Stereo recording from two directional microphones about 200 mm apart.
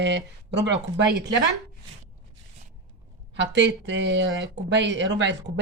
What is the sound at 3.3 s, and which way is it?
Speech, 65° right (ahead or behind).